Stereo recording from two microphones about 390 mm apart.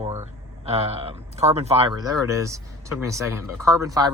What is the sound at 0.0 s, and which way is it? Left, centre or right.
Speech, centre.